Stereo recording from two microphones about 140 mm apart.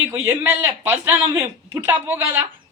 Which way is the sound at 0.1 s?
20° right (ahead or behind).